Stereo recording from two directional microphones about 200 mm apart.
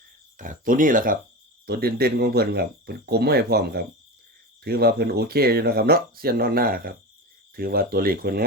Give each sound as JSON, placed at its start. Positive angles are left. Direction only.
{"t": 0.3, "sound": "speech", "side_deg": -40}